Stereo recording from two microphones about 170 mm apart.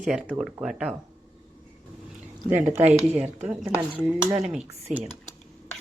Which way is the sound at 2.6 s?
15° right (ahead or behind).